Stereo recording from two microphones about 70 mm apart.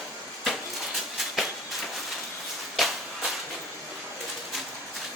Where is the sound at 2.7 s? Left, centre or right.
Centre.